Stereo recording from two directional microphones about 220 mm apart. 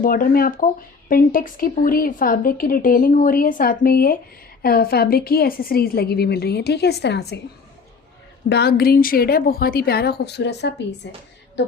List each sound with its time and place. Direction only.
0.0 s a woman's voice: 40° left (ahead or behind)
8.4 s a woman's voice: 50° left (ahead or behind)